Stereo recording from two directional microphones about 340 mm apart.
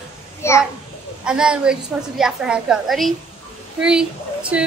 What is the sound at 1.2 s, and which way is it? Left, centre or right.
A woman's voice, centre.